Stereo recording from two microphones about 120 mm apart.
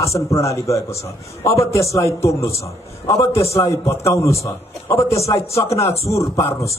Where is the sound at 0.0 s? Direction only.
25° left (ahead or behind).